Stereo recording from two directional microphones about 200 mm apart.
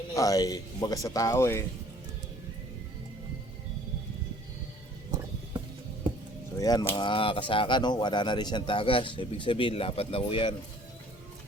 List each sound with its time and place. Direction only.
0.2 s speech: 15° left (ahead or behind)
6.6 s speech: 20° left (ahead or behind)